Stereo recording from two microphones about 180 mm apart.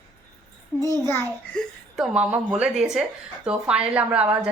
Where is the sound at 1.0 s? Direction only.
15° left (ahead or behind).